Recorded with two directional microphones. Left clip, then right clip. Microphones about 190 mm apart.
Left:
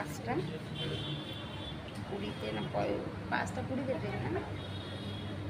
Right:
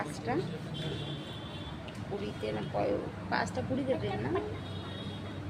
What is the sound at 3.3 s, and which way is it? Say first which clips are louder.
Speech: right 2 dB; 15° right (ahead or behind).